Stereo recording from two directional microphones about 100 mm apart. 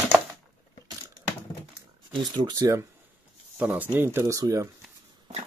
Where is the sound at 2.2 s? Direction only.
40° right (ahead or behind).